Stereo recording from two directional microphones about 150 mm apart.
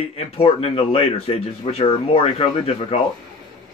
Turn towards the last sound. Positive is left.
turn(degrees=40)  # may be behind; listen again after turning